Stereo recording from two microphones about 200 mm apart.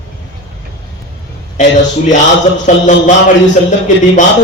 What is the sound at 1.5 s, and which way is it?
A man's voice, 40° left (ahead or behind).